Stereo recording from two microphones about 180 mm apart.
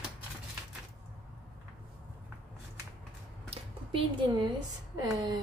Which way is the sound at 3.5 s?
25° right (ahead or behind).